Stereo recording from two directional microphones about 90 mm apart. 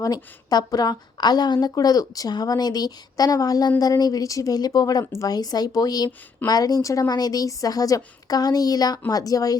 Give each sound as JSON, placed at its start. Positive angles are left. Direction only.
{"t": 0.0, "sound": "a woman's voice", "side_deg": 45}